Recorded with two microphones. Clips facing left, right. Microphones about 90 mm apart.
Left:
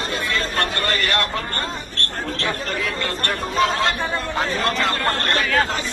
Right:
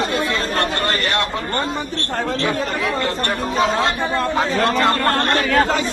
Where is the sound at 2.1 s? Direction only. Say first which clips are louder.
Right 7 dB; 80° right.